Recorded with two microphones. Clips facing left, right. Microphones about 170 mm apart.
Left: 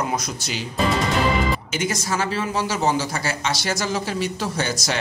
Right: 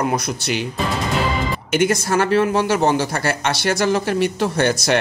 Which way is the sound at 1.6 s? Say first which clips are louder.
Right 7 dB; 60° right (ahead or behind).